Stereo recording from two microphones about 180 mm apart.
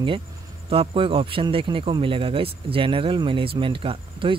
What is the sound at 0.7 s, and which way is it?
A man's voice, 30° right (ahead or behind).